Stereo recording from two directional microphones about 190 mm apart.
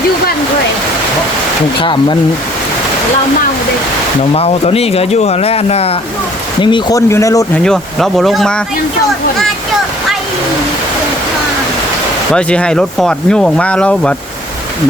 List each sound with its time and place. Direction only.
1.8 s speech: 25° left (ahead or behind)
4.2 s speech: 35° left (ahead or behind); by 7.6 s 15° left (ahead or behind)
7.6 s speech: centre (ahead or behind)
12.3 s speech: 5° left (ahead or behind)